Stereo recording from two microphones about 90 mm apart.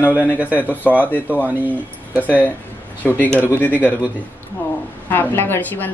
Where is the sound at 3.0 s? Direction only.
10° left (ahead or behind).